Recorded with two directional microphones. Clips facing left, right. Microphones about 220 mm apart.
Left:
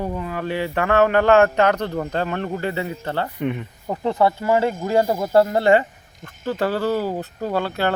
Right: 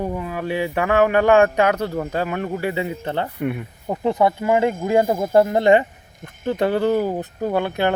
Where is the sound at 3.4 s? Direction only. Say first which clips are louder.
Even; 5° right (ahead or behind).